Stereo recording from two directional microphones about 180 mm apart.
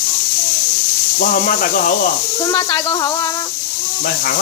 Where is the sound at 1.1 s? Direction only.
55° left (ahead or behind).